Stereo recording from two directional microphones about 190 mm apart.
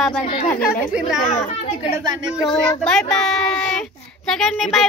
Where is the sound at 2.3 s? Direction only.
Centre (ahead or behind).